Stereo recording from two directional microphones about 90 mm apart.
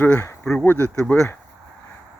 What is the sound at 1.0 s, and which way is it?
Speech, 10° left (ahead or behind).